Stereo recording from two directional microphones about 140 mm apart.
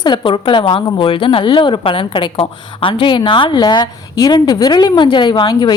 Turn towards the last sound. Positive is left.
turn(degrees=30)  # may be behind; listen again after turning